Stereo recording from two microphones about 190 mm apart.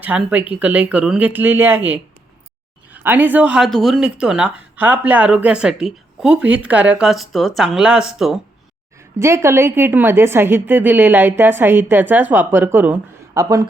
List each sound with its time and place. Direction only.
0.0 s a woman's voice: 10° right (ahead or behind)
9.2 s a woman's voice: 15° right (ahead or behind)